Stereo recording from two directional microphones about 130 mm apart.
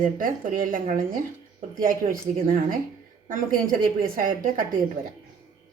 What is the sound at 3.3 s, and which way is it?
A woman's voice, 90° right.